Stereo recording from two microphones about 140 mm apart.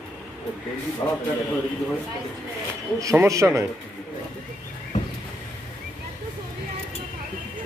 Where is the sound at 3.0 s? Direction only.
20° right (ahead or behind).